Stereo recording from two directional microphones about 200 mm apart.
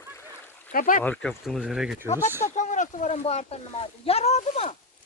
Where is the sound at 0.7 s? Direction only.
40° left (ahead or behind).